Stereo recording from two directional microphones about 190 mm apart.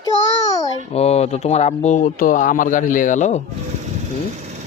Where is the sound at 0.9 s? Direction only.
35° left (ahead or behind).